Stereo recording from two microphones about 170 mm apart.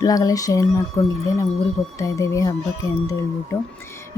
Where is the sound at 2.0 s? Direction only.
20° left (ahead or behind).